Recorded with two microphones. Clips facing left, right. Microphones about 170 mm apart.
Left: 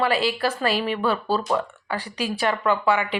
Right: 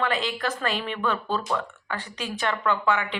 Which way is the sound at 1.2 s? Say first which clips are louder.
Left 4 dB; 35° left (ahead or behind).